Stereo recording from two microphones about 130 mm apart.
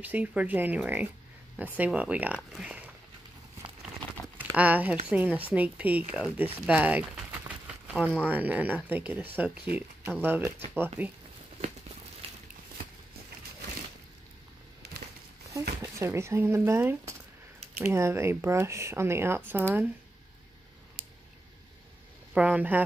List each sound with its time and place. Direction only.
0.0 s speech: 10° right (ahead or behind)
4.4 s speech: 10° right (ahead or behind)
7.2 s a sound: 10° right (ahead or behind)
8.2 s speech: 10° right (ahead or behind)
15.5 s speech: 20° right (ahead or behind)
22.3 s speech: 10° right (ahead or behind)